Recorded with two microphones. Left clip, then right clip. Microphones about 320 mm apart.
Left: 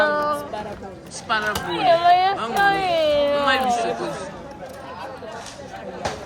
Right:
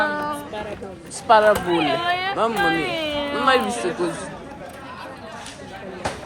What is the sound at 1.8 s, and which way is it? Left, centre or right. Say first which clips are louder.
Speech: left 6 dB; left.